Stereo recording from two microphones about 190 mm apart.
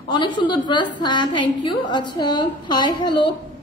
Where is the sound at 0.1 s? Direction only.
25° left (ahead or behind).